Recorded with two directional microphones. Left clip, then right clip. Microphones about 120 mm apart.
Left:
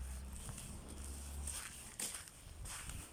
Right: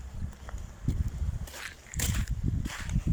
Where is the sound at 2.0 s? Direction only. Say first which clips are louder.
Right 13 dB; 45° right (ahead or behind).